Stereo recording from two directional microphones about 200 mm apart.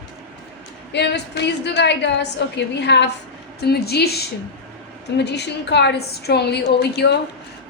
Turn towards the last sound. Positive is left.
turn(degrees=55)  # may be behind; listen again after turning